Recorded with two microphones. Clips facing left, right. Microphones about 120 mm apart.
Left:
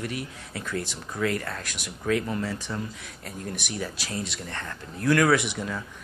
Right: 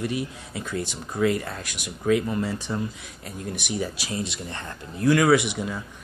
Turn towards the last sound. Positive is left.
turn(degrees=-15)  # may be behind; listen again after turning